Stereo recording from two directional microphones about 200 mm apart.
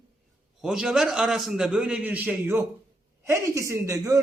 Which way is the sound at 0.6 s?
5° right (ahead or behind).